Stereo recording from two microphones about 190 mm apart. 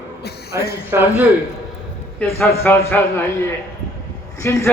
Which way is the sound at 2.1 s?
10° left (ahead or behind).